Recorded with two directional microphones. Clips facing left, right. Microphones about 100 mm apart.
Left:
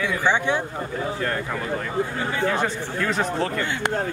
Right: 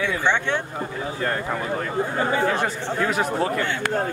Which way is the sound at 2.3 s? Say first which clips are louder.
Left 3 dB; 10° right (ahead or behind).